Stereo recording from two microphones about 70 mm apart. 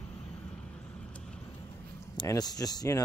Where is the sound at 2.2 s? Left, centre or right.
Left.